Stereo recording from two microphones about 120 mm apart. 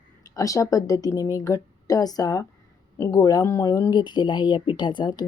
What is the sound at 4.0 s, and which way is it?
Speech, 40° left (ahead or behind).